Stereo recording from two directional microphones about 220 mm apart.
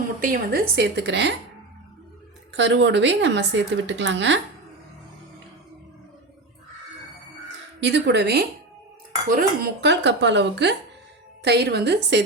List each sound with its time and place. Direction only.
0.2 s speech: 40° right (ahead or behind)
2.5 s speech: 55° right (ahead or behind)
7.9 s speech: 50° right (ahead or behind)